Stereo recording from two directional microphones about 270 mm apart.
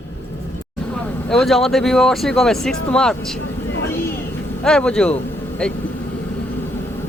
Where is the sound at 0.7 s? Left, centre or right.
Centre.